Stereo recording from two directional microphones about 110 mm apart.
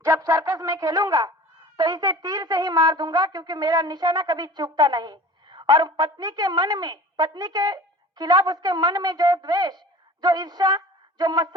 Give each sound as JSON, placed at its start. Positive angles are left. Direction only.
{"t": 0.0, "sound": "a woman's voice", "side_deg": -25}